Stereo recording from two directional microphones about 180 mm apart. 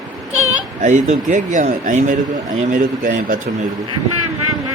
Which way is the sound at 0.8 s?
40° right (ahead or behind).